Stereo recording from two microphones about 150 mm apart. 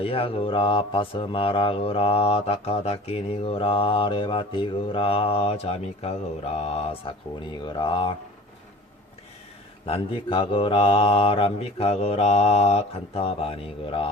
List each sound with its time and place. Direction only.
0.0 s speech: 40° left (ahead or behind)
7.6 s speech: 30° left (ahead or behind)
9.8 s speech: 40° left (ahead or behind)